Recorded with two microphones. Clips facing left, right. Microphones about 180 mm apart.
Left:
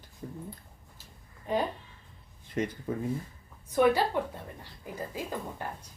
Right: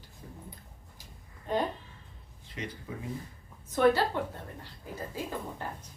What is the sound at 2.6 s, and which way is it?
Speech, 45° left (ahead or behind).